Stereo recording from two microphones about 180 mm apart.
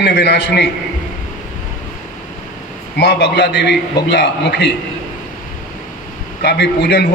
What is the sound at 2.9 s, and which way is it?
A man's voice, 70° left (ahead or behind).